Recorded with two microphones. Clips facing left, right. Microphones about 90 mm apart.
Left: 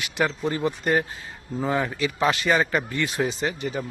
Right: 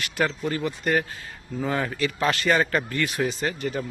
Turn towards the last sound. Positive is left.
turn(degrees=15)  # may be behind; listen again after turning